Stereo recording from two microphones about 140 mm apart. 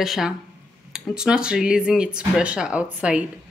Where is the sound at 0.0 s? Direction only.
Centre (ahead or behind).